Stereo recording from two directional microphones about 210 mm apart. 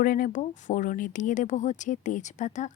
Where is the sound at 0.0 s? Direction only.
40° left (ahead or behind).